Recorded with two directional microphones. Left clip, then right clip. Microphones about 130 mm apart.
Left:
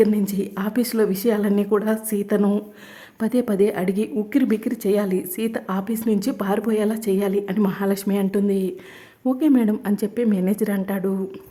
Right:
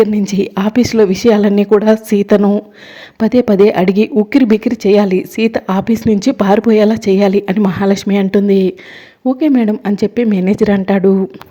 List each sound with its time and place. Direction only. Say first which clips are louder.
0.0 s speech: right 7 dB; 40° right (ahead or behind)
2.4 s speech: right 9 dB; 25° right (ahead or behind); by 8.7 s 40° right (ahead or behind)
9.2 s speech: right 7 dB; 25° right (ahead or behind)